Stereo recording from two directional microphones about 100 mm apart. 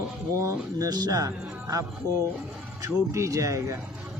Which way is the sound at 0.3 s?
35° right (ahead or behind).